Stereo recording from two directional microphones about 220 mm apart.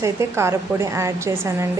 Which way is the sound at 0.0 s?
10° right (ahead or behind).